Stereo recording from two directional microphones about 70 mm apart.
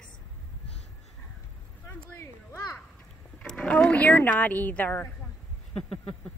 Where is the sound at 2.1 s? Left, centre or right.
Left.